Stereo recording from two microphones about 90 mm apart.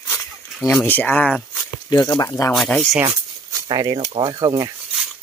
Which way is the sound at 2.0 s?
45° left (ahead or behind).